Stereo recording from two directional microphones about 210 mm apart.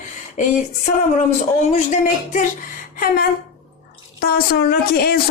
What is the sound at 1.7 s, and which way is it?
Speech, 35° left (ahead or behind).